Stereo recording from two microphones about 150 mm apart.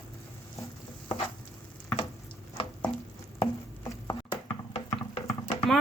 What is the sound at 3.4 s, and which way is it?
Chopping, 25° left (ahead or behind).